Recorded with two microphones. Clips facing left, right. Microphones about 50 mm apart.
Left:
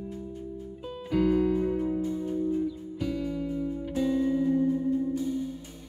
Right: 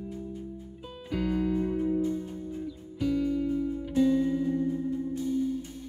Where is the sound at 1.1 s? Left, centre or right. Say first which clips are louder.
Left 4 dB; centre.